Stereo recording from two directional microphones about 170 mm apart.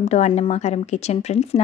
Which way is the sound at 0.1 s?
40° left (ahead or behind).